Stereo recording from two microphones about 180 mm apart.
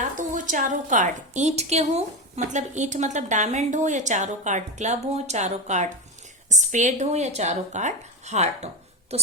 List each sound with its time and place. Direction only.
0.2 s a woman's voice: 45° right (ahead or behind)